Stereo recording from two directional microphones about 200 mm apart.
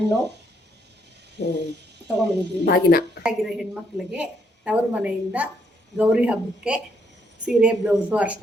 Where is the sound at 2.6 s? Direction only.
50° left (ahead or behind).